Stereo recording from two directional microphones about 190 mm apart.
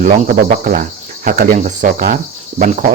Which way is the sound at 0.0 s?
45° right (ahead or behind).